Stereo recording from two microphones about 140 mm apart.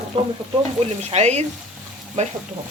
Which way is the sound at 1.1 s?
50° right (ahead or behind).